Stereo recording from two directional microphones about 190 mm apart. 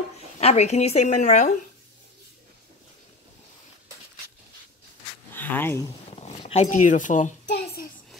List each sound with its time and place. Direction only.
0.4 s speech: 35° left (ahead or behind)
5.3 s speech: 10° left (ahead or behind)
6.0 s a sound: 35° left (ahead or behind)